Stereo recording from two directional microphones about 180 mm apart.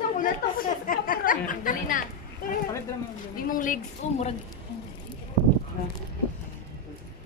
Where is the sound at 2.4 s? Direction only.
55° left (ahead or behind).